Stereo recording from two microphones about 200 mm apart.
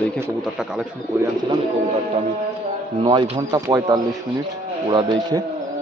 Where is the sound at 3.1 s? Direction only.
20° right (ahead or behind).